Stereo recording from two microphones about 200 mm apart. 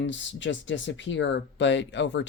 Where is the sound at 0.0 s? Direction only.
65° left (ahead or behind).